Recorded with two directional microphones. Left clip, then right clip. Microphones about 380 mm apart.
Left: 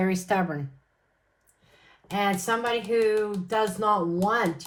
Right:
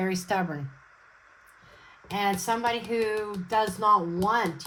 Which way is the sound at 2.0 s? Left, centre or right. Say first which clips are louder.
Left 1 dB; right.